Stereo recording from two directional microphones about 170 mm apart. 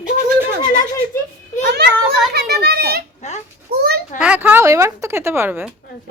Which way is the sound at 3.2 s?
45° left (ahead or behind).